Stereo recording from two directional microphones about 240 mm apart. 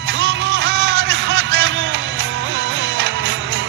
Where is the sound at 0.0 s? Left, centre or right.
Right.